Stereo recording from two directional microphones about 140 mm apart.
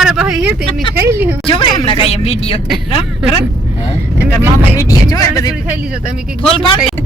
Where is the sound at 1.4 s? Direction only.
35° left (ahead or behind).